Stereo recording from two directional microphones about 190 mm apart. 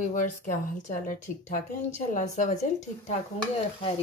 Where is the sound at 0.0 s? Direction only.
40° left (ahead or behind).